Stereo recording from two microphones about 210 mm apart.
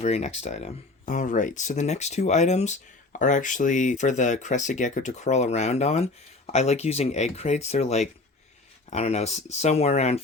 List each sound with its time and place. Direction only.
0.0 s speech: 30° left (ahead or behind)